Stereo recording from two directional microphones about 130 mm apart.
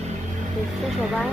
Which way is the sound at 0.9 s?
Centre (ahead or behind).